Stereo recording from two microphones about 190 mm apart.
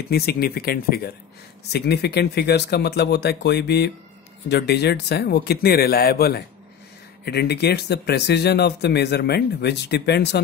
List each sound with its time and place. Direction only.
0.1 s speech: 55° left (ahead or behind)